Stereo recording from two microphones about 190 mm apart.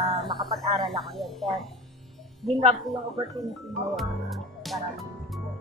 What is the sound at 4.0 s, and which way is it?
Speech, centre (ahead or behind).